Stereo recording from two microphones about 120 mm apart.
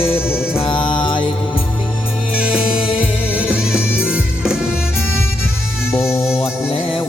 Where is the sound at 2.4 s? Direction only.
10° right (ahead or behind).